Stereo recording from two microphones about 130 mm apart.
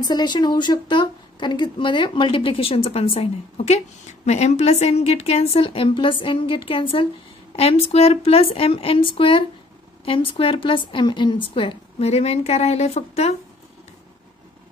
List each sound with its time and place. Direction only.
0.0 s a woman's voice: 35° left (ahead or behind); by 13.3 s 55° left (ahead or behind)